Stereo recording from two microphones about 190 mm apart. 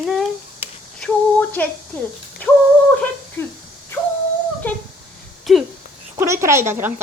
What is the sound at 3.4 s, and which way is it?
Female singing, 10° left (ahead or behind).